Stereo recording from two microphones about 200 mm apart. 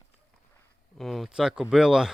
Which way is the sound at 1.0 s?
Centre (ahead or behind).